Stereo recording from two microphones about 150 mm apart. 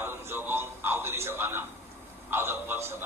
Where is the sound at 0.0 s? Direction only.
15° right (ahead or behind).